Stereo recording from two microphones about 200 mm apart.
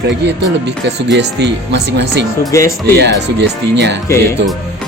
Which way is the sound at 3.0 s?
60° right (ahead or behind).